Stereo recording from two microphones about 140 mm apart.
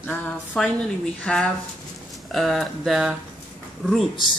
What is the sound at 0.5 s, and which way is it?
Speech, 5° left (ahead or behind).